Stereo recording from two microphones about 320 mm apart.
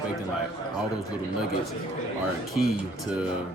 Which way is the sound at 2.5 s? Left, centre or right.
Centre.